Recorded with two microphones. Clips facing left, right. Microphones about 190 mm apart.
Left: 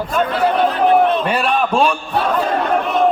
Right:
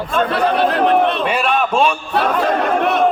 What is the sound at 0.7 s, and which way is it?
Speech, 70° right (ahead or behind).